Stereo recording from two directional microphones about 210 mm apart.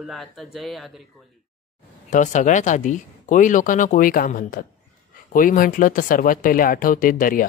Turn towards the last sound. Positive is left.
turn(degrees=40)  # may be behind; listen again after turning